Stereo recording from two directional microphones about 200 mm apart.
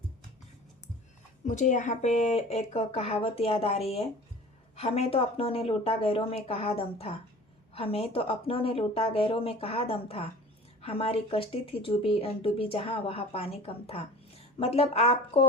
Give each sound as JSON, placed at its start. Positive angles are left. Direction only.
{"t": 1.5, "sound": "speech", "side_deg": 40}